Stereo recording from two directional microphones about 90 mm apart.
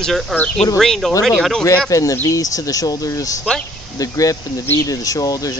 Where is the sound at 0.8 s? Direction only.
5° left (ahead or behind).